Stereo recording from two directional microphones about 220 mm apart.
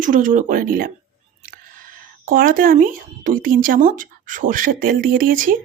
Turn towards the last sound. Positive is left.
turn(degrees=-40)  # may be behind; listen again after turning